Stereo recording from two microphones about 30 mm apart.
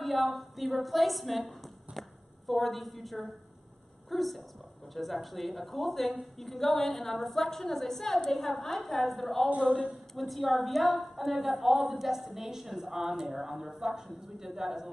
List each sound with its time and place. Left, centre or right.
0.0 s a woman's voice: centre
2.0 s a sound: centre
4.1 s a woman's voice: centre